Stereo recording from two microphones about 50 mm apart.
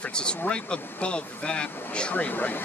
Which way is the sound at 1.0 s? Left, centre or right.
Centre.